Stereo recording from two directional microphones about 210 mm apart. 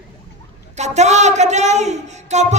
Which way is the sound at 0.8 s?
35° right (ahead or behind).